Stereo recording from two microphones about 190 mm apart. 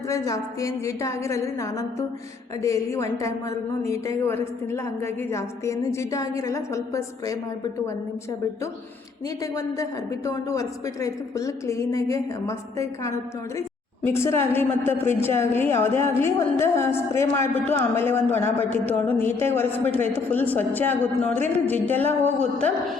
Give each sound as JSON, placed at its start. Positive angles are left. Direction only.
{"t": 0.1, "sound": "a woman's voice", "side_deg": 15}